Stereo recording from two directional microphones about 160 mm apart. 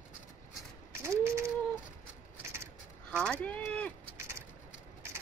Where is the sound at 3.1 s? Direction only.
5° left (ahead or behind).